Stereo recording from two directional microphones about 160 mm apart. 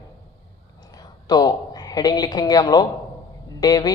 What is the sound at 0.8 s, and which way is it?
Frog, 25° left (ahead or behind).